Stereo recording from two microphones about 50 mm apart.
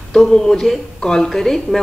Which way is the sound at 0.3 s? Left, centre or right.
Centre.